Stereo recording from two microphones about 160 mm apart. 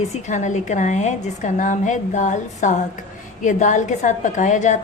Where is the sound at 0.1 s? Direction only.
50° left (ahead or behind).